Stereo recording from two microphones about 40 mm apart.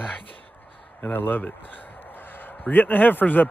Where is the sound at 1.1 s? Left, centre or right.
Left.